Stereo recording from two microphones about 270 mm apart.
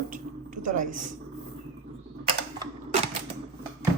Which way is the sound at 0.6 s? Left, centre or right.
Right.